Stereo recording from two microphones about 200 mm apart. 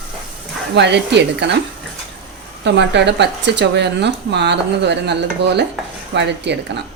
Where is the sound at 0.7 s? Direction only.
60° right (ahead or behind).